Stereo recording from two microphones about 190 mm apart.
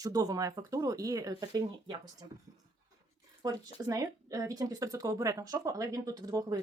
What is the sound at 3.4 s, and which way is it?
Speech, 20° right (ahead or behind).